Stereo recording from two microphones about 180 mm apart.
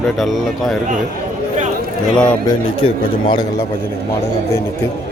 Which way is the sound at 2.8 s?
25° left (ahead or behind).